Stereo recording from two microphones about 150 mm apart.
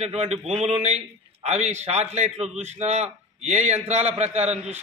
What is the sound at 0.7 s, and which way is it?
A man's voice, 45° right (ahead or behind).